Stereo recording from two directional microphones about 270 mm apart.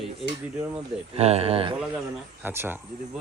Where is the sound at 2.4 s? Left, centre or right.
Centre.